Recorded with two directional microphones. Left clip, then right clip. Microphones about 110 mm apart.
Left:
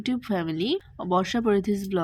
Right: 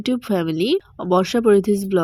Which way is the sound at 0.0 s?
45° right (ahead or behind).